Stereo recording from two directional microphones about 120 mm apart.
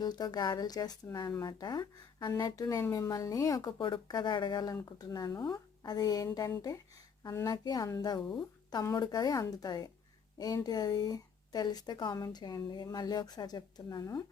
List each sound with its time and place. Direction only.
0.0 s speech: 35° left (ahead or behind)
3.8 s speech: 40° left (ahead or behind)